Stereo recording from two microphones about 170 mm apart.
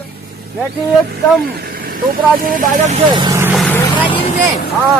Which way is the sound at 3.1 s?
25° right (ahead or behind).